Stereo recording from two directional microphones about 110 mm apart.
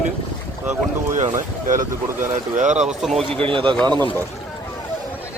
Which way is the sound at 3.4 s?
50° right (ahead or behind).